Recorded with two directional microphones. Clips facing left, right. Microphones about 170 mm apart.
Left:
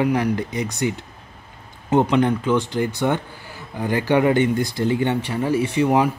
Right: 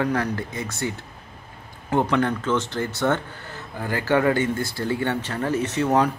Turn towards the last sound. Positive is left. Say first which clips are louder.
# left 3 dB
turn(degrees=15)  # may be behind; listen again after turning